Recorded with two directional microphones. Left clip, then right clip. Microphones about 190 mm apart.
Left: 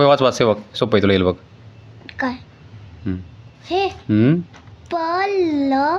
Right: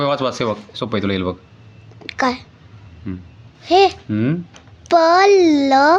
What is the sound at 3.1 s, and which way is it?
Speech, 30° left (ahead or behind).